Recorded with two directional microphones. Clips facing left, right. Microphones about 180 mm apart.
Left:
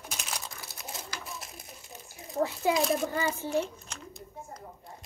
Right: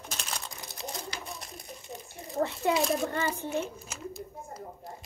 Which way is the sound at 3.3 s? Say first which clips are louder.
Left 2 dB; 5° right (ahead or behind).